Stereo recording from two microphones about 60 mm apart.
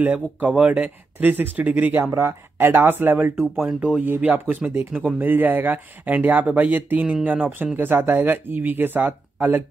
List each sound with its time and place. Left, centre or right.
0.0 s speech: right
3.6 s speech: centre
4.0 s speech: right